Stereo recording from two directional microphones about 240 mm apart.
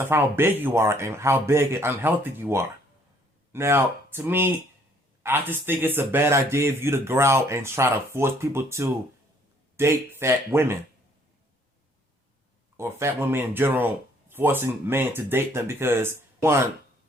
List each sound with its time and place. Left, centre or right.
0.0 s speech: centre
12.7 s speech: centre